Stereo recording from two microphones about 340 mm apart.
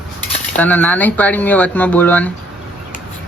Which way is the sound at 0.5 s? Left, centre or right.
Centre.